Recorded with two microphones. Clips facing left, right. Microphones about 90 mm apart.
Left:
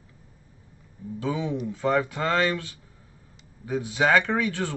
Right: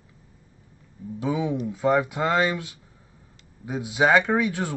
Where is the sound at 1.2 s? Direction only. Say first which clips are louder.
Right 2 dB; 15° right (ahead or behind).